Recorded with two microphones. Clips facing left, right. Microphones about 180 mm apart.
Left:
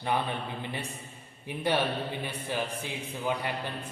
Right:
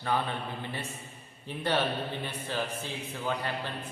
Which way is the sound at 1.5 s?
10° left (ahead or behind).